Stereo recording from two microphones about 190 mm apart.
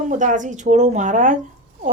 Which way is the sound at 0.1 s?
40° right (ahead or behind).